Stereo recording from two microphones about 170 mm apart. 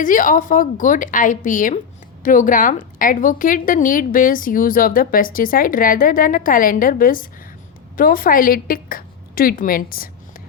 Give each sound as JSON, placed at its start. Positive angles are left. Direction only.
{"t": 0.0, "sound": "a woman's voice", "side_deg": 50}